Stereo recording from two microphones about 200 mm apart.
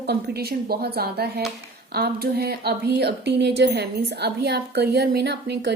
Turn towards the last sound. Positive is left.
turn(degrees=-55)  # may be behind; listen again after turning